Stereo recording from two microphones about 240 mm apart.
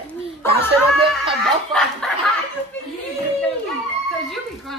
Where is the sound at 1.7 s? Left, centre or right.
Centre.